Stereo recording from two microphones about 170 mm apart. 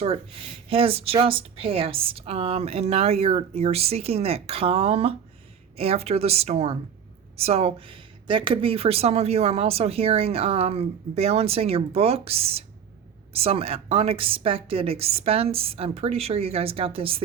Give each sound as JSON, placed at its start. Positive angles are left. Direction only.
{"t": 0.7, "sound": "speech", "side_deg": -35}